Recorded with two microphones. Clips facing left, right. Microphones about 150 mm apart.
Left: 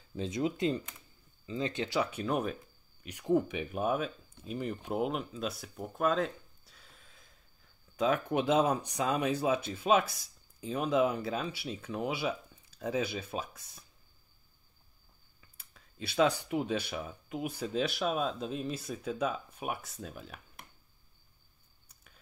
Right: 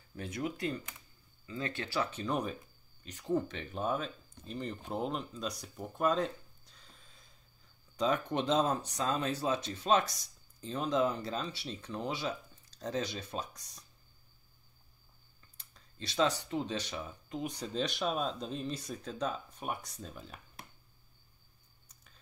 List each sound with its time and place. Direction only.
0.1 s speech: 20° left (ahead or behind); by 13.8 s 5° left (ahead or behind)
15.5 s speech: 5° left (ahead or behind)
21.8 s a sound: 10° left (ahead or behind)